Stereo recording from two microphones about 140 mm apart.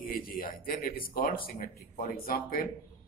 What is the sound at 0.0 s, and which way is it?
Speech, 90° left.